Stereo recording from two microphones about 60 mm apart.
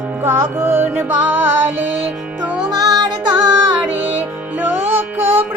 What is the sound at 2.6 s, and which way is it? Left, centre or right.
Music, right.